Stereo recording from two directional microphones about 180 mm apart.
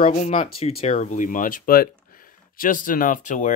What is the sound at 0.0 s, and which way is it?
Speech, 40° left (ahead or behind).